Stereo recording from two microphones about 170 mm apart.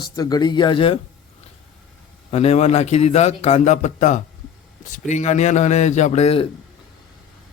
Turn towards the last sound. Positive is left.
turn(degrees=35)  # may be behind; listen again after turning